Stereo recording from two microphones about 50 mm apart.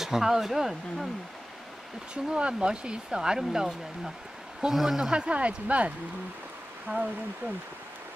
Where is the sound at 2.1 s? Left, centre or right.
Centre.